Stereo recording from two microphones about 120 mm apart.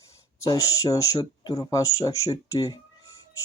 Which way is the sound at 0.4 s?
30° left (ahead or behind).